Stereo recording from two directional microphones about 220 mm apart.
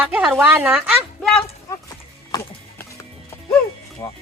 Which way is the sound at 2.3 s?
10° left (ahead or behind).